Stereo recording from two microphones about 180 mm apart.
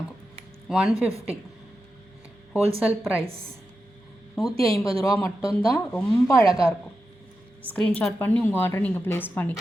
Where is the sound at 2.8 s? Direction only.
5° right (ahead or behind).